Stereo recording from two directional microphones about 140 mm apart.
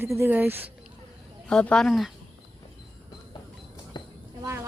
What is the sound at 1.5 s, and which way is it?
Speech, 5° left (ahead or behind).